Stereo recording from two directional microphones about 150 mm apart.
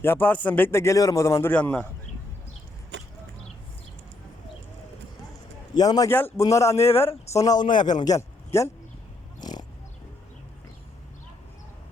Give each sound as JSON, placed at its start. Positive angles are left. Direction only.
{"t": 0.0, "sound": "a man's voice", "side_deg": 15}
{"t": 5.7, "sound": "a man's voice", "side_deg": 25}
{"t": 9.4, "sound": "pig", "side_deg": 25}